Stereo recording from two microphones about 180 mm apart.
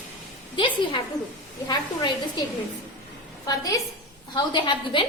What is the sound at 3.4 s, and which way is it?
A woman's voice, 20° left (ahead or behind).